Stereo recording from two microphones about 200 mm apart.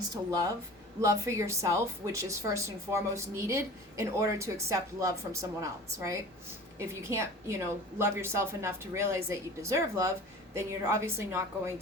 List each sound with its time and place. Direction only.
0.1 s speech: 20° right (ahead or behind)